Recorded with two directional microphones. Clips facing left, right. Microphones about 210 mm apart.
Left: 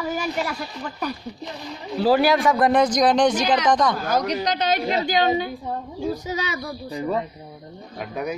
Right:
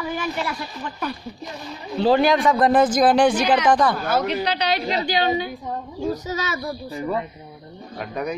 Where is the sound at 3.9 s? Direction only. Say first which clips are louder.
Right 1 dB; 40° left (ahead or behind).